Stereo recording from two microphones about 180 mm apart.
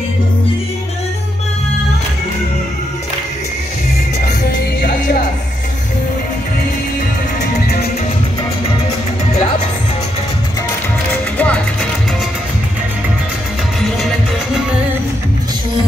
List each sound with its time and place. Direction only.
11.3 s music: 5° left (ahead or behind)